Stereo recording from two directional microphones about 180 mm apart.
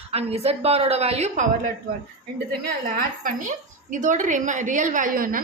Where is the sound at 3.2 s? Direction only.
45° right (ahead or behind).